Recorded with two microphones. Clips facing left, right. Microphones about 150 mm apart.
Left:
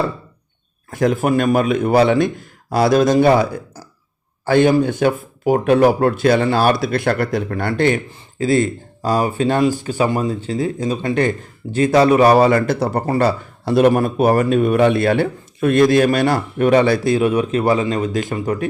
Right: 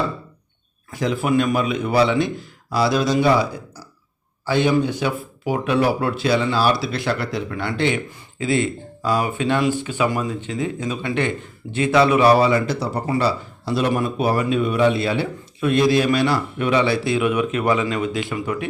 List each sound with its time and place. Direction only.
0.9 s speech: 50° left (ahead or behind)